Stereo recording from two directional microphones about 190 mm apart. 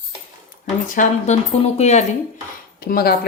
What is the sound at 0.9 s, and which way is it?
Speech, 40° left (ahead or behind).